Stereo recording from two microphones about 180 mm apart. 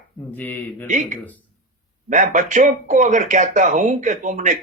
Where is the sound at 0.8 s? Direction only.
45° right (ahead or behind).